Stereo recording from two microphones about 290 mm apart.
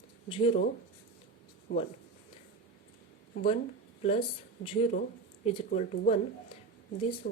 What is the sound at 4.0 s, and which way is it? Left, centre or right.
Speech, left.